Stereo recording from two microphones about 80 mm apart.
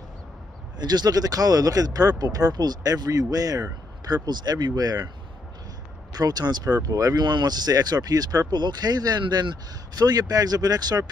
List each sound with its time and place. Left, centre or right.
0.7 s speech: right
4.1 s speech: right
6.1 s speech: right
6.8 s speech: right
7.2 s speech: right
9.2 s speech: right
9.9 s speech: right